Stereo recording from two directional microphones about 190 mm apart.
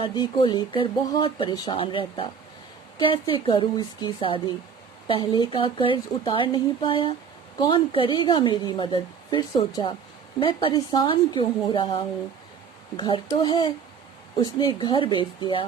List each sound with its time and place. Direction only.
0.0 s a woman's voice: 25° left (ahead or behind)